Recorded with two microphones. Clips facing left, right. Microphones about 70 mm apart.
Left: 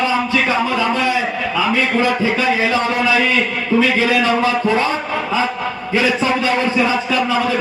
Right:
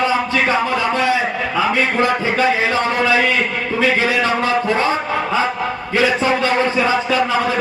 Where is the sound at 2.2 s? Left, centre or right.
Right.